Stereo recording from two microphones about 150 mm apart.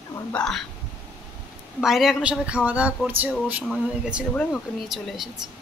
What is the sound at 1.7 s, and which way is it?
A woman's voice, centre (ahead or behind).